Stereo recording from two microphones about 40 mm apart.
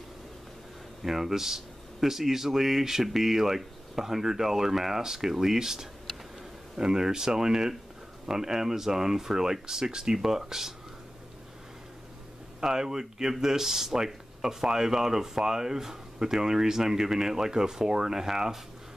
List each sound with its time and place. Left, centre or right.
1.0 s speech: centre
12.6 s speech: centre